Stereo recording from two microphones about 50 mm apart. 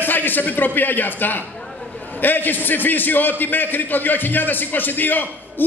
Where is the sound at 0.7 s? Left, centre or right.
Left.